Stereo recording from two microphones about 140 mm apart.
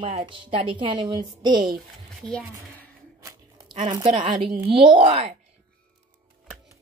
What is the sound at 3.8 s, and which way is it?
A woman's voice, 35° right (ahead or behind).